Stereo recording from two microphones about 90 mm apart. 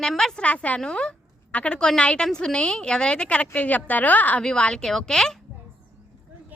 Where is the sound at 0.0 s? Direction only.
5° left (ahead or behind).